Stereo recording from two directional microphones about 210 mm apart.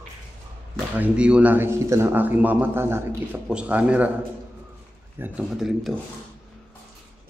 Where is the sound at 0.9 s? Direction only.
5° right (ahead or behind).